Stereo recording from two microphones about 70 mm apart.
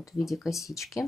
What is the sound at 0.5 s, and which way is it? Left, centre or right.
Speech, left.